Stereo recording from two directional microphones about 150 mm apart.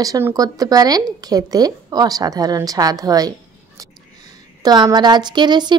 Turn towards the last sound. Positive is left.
turn(degrees=-30)  # may be behind; listen again after turning